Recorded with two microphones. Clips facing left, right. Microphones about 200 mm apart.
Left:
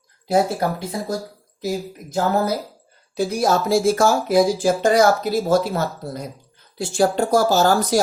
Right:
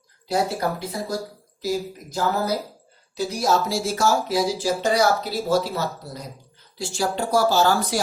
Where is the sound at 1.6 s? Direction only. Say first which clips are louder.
Even; 50° left (ahead or behind).